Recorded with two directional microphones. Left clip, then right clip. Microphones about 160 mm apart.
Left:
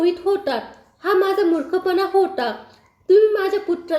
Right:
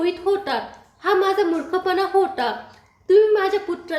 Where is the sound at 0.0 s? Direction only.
25° left (ahead or behind).